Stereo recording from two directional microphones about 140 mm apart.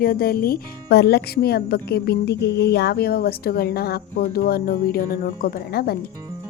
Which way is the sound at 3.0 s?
90° left.